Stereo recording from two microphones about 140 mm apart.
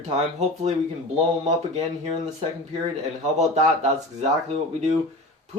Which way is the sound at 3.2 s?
55° right (ahead or behind).